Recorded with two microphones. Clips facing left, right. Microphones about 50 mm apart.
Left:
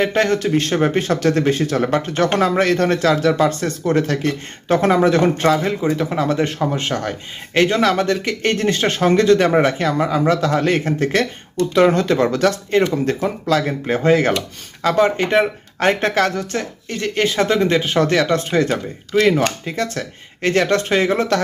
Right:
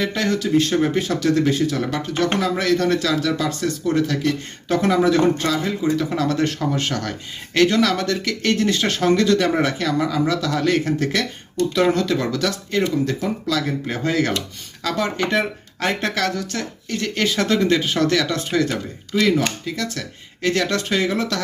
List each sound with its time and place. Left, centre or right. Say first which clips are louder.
0.0 s speech: left 5 dB; left